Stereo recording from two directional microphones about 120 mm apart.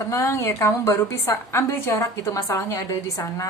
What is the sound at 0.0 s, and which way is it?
A woman's voice, 25° left (ahead or behind).